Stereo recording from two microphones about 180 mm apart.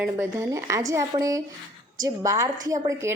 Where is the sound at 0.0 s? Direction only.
15° right (ahead or behind).